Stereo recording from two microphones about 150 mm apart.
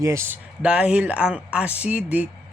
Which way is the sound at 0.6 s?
10° right (ahead or behind).